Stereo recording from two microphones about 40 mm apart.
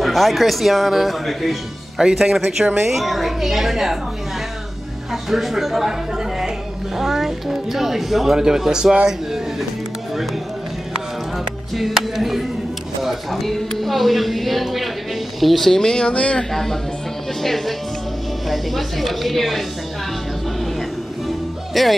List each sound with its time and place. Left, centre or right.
0.0 s speech: centre
2.0 s speech: centre
5.1 s speech: centre
7.0 s speech: centre
11.3 s speech: centre
15.7 s speech: centre
16.1 s a man's voice: left
17.4 s speech: centre
21.7 s speech: centre